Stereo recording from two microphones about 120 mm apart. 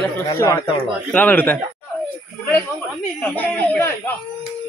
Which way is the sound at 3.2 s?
15° left (ahead or behind).